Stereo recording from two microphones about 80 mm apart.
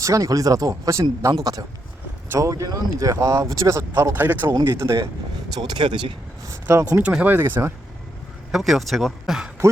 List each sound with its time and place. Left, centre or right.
0.0 s speech: right
4.1 s speech: right
4.7 s speech: right
5.5 s speech: right
6.7 s speech: right
7.1 s speech: centre
8.5 s speech: centre